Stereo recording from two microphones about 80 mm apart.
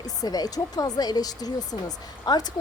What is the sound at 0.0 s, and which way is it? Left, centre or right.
Speech, left.